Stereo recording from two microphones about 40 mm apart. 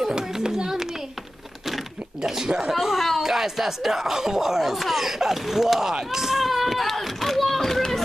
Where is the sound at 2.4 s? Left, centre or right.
Centre.